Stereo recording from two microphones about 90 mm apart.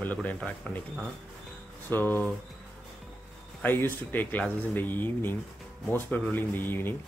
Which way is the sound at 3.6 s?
25° left (ahead or behind).